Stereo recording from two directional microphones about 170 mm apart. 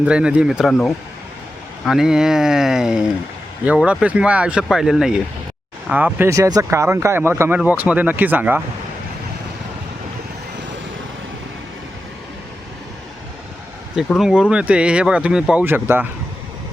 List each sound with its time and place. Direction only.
0.0 s speech: 5° right (ahead or behind)
13.9 s speech: centre (ahead or behind)